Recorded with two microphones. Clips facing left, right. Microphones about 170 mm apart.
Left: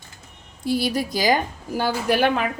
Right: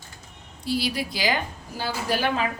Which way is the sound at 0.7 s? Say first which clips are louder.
Left 4 dB; 50° left (ahead or behind).